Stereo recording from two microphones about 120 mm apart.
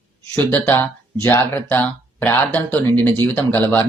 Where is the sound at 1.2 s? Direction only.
15° left (ahead or behind).